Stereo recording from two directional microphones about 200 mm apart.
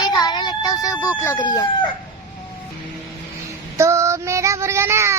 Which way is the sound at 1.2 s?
15° left (ahead or behind).